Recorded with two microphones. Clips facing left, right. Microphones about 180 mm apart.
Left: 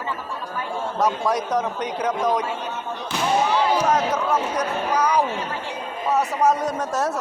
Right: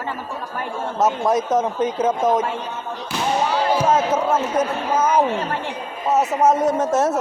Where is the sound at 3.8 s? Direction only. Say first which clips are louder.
Right 3 dB; 25° right (ahead or behind).